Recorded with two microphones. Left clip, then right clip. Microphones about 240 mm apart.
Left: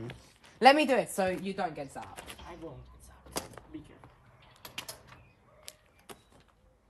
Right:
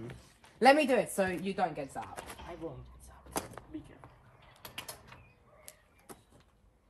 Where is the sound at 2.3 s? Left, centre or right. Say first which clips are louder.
Right 2 dB; centre.